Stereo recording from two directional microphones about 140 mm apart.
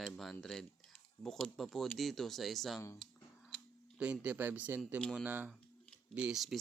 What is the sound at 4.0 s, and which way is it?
Speech, 10° right (ahead or behind).